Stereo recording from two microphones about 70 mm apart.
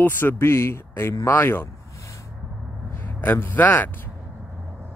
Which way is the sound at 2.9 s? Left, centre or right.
Left.